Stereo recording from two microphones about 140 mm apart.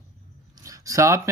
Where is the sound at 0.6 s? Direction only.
25° right (ahead or behind).